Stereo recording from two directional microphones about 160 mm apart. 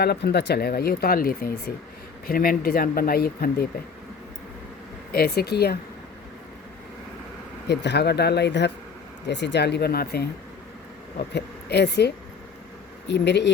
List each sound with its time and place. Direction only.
0.0 s speech: 90° left; by 3.7 s 70° left (ahead or behind)
5.1 s speech: 75° left (ahead or behind)
7.7 s speech: 90° left
11.2 s speech: 90° left